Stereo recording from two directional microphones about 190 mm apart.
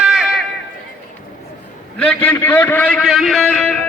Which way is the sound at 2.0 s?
10° left (ahead or behind).